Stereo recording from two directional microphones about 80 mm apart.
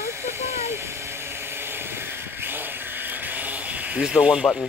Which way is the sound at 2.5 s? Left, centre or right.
Right.